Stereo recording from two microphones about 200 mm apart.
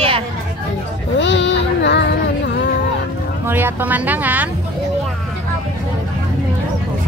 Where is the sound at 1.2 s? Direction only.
65° left (ahead or behind).